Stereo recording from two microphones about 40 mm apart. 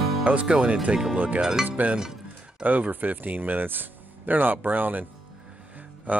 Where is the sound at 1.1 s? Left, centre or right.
Right.